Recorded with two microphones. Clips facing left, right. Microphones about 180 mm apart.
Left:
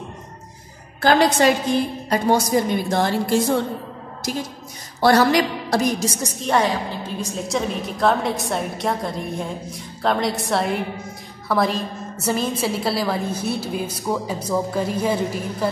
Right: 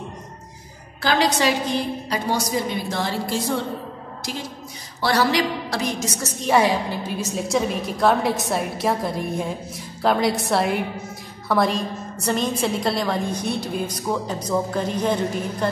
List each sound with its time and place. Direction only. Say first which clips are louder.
1.0 s a woman's voice: left 4 dB; 50° left (ahead or behind)
5.0 s a woman's voice: left 4 dB; 50° left (ahead or behind)
6.4 s a woman's voice: right 2 dB; 5° right (ahead or behind)